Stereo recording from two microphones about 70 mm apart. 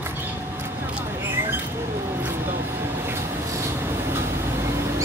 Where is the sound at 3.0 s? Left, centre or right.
Right.